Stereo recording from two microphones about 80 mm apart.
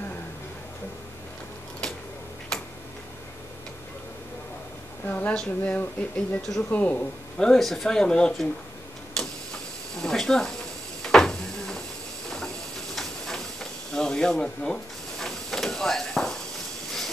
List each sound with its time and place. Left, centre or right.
2.5 s tick-tock: centre
5.0 s a woman's voice: left
7.3 s speech: centre
9.9 s a sound: centre
12.9 s hiss: centre